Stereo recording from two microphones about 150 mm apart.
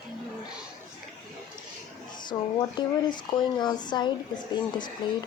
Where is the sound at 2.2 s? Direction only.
30° left (ahead or behind).